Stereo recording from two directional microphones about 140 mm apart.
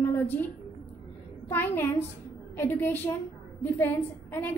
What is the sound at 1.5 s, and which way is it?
A child's voice, 15° left (ahead or behind).